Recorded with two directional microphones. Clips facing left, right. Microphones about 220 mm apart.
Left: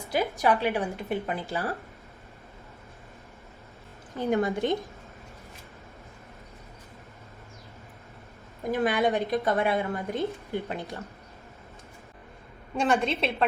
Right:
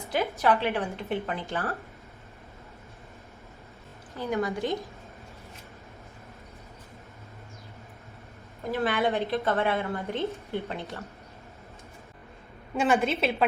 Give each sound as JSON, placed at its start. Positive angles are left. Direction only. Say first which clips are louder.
{"t": 0.1, "sound": "speech", "louder": "even", "side_deg": 10}
{"t": 4.4, "sound": "a woman's voice", "louder": "left 1 dB", "side_deg": 25}
{"t": 8.7, "sound": "speech", "louder": "left 2 dB", "side_deg": 15}
{"t": 12.7, "sound": "a woman's voice", "louder": "right 1 dB", "side_deg": 0}